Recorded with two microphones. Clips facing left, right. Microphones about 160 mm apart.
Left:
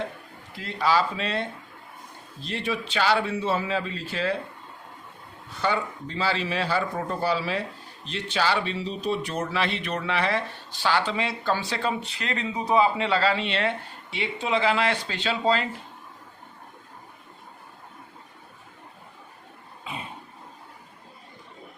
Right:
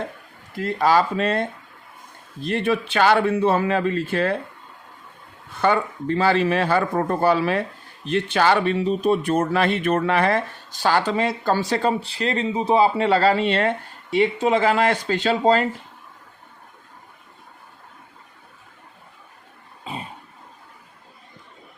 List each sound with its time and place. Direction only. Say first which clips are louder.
0.5 s speech: right 5 dB; 50° right (ahead or behind)
5.5 s speech: right 6 dB; 55° right (ahead or behind)
19.8 s cough: right 4 dB; 35° right (ahead or behind)